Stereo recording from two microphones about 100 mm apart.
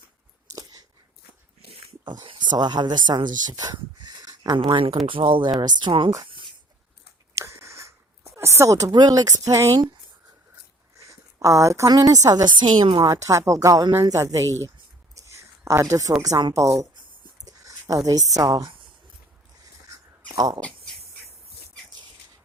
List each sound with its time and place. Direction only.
0.5 s chewing: 40° right (ahead or behind)
2.2 s speech: 55° right (ahead or behind)
6.2 s a sound: 55° right (ahead or behind)
7.3 s a sound: 30° right (ahead or behind)
8.9 s speech: 45° right (ahead or behind)
10.9 s a woman's voice: 30° right (ahead or behind); by 13.1 s 50° right (ahead or behind)
13.1 s speech: 30° right (ahead or behind)
14.4 s speech: 25° left (ahead or behind)
15.1 s whispering: 30° right (ahead or behind)
16.6 s speech: 30° right (ahead or behind)
17.4 s a sound: 35° right (ahead or behind)
18.6 s a sound: 55° right (ahead or behind)
20.3 s speech: 35° right (ahead or behind)